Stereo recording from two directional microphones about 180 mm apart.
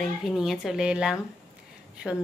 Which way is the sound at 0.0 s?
Centre (ahead or behind).